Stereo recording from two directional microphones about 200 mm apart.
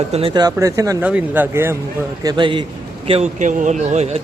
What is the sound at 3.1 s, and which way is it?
Speech, 35° right (ahead or behind).